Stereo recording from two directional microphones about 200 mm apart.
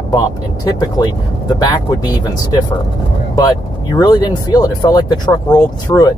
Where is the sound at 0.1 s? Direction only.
20° left (ahead or behind).